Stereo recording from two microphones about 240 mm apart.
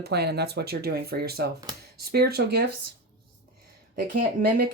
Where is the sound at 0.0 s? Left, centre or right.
Right.